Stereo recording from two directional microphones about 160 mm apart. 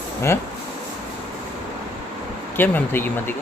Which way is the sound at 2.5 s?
15° left (ahead or behind).